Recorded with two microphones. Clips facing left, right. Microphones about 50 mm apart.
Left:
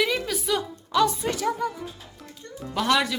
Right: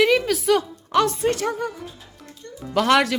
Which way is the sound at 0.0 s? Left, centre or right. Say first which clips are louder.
Right 7 dB; right.